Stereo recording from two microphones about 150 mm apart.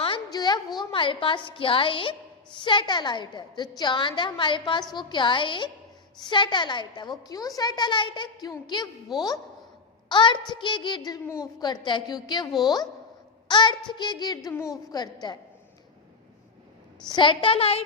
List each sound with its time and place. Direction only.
0.0 s a woman's voice: 30° left (ahead or behind)
17.1 s a woman's voice: 30° left (ahead or behind)